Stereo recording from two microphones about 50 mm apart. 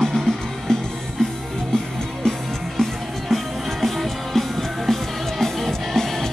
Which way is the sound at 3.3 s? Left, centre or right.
Centre.